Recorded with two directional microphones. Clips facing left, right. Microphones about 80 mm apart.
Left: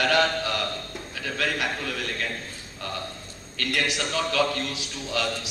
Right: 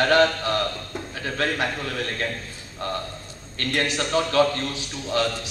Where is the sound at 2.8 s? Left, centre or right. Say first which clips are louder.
Right 5 dB; right.